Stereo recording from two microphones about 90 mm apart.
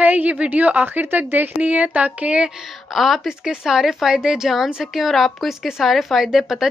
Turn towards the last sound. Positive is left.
turn(degrees=-5)  # may be behind; listen again after turning